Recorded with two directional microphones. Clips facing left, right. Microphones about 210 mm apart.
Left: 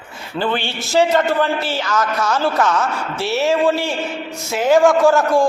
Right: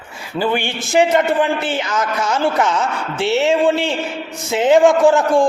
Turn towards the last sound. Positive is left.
turn(degrees=-15)  # may be behind; listen again after turning